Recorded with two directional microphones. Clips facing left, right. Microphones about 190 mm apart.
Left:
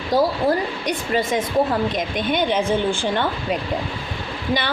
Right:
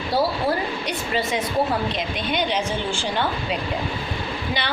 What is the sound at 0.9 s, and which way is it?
A woman's voice, 45° left (ahead or behind).